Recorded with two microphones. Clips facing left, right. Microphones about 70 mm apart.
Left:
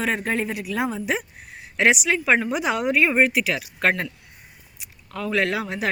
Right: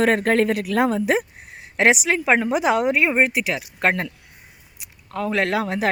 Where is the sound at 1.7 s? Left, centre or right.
Right.